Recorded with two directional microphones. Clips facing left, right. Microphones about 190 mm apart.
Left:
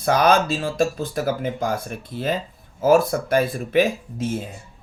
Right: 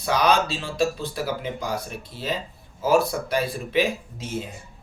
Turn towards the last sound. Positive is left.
turn(degrees=50)  # may be behind; listen again after turning